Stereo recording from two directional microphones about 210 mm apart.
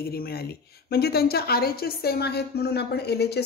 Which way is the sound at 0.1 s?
50° left (ahead or behind).